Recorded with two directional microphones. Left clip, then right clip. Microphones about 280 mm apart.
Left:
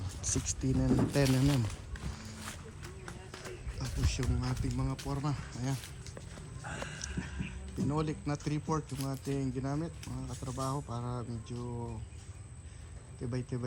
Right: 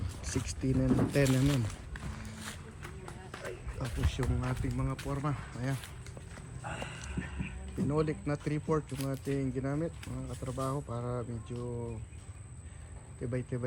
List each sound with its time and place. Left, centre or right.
0.2 s speech: centre
3.3 s a sound: centre
4.4 s speech: centre
6.6 s a sound: right
7.9 s speech: centre
13.3 s speech: centre